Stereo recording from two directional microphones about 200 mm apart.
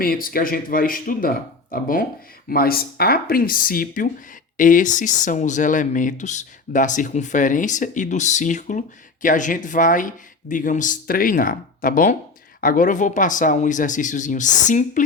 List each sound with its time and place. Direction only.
0.0 s speech: 45° left (ahead or behind)